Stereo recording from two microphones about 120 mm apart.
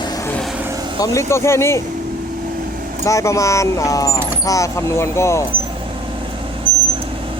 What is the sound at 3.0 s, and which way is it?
Speech, 25° left (ahead or behind).